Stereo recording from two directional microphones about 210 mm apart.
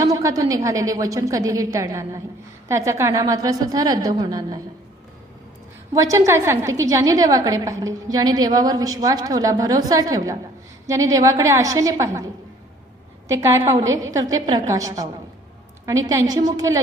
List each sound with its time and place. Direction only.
0.0 s a woman's voice: 15° right (ahead or behind)
5.9 s a woman's voice: 15° right (ahead or behind)